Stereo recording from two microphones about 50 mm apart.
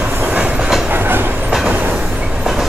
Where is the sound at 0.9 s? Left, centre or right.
Right.